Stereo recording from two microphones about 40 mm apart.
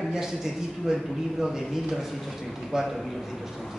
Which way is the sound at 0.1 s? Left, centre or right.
Centre.